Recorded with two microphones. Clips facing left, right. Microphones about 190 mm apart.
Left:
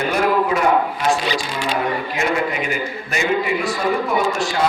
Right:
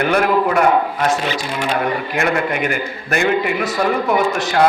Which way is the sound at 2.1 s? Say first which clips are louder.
Right 3 dB; 60° right (ahead or behind).